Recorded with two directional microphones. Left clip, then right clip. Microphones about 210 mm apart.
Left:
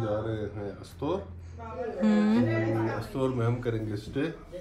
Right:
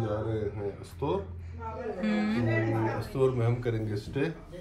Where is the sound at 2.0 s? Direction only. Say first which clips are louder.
Left 6 dB; 20° left (ahead or behind).